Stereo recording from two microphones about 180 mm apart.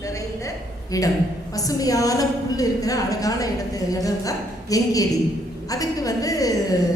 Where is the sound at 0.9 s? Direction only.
20° left (ahead or behind).